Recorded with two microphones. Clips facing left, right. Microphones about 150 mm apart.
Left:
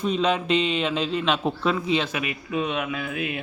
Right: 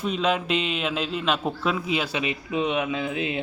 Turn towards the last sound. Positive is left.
turn(degrees=-25)  # may be behind; listen again after turning